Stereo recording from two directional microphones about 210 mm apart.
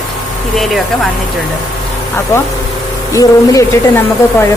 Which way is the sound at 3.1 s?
15° left (ahead or behind).